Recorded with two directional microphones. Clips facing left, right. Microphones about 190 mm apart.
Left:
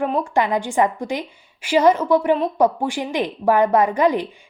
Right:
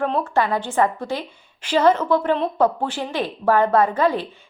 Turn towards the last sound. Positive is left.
turn(degrees=15)  # may be behind; listen again after turning